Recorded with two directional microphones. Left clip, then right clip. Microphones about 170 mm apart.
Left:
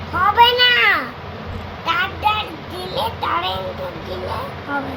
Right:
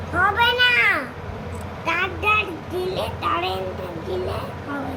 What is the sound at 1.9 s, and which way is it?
Child singing, 35° left (ahead or behind).